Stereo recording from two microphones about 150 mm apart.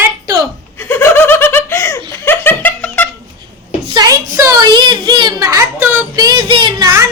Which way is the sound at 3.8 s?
25° right (ahead or behind).